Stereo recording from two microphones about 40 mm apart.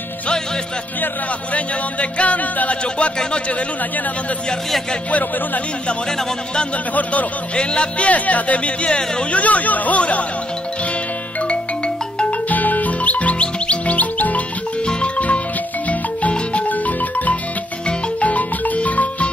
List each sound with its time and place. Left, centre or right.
1.5 s speech: left
7.5 s speech: left
12.4 s music: left
15.1 s marimba: left
18.2 s music: left